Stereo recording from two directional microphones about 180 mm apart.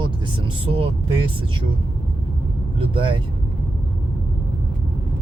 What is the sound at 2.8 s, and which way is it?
Speech, 30° right (ahead or behind).